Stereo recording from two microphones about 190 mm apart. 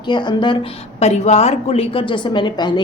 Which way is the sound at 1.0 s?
35° left (ahead or behind).